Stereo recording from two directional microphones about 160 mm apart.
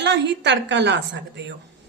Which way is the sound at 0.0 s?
90° right.